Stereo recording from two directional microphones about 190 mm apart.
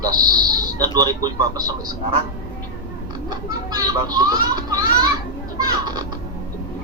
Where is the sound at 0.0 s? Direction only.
20° right (ahead or behind).